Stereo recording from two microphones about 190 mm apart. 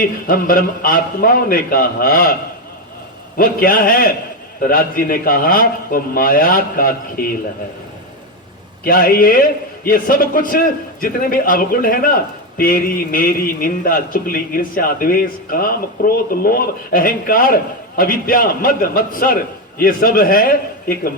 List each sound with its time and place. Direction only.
0.0 s a man's voice: 50° left (ahead or behind)
3.3 s a man's voice: 50° left (ahead or behind)
8.8 s a man's voice: 50° left (ahead or behind)